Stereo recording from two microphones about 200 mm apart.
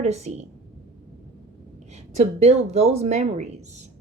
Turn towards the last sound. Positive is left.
turn(degrees=-35)  # may be behind; listen again after turning